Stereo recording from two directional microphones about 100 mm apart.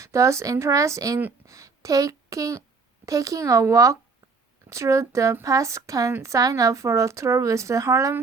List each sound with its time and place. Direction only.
0.0 s speech: 30° right (ahead or behind)